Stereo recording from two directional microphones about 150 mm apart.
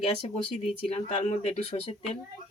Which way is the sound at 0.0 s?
45° left (ahead or behind).